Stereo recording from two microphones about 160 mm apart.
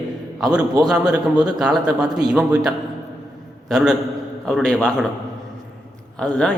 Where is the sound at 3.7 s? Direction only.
5° right (ahead or behind).